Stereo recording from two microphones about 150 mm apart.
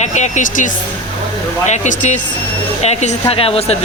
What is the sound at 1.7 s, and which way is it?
Speech, 55° left (ahead or behind).